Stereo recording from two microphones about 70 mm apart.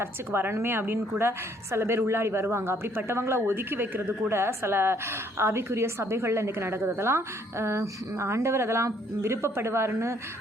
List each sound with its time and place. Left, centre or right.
0.0 s a woman's voice: right